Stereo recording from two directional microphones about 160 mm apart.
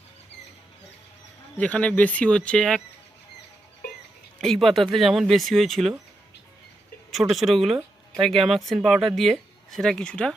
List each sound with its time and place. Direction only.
1.5 s speech: 10° left (ahead or behind)
3.8 s music: 65° left (ahead or behind)
4.4 s speech: 5° left (ahead or behind)
7.1 s speech: centre (ahead or behind)